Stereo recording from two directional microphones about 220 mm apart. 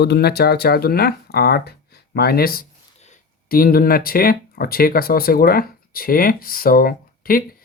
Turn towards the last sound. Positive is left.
turn(degrees=40)  # may be behind; listen again after turning